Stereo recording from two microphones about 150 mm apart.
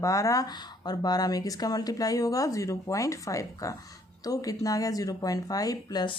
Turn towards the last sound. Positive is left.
turn(degrees=25)  # may be behind; listen again after turning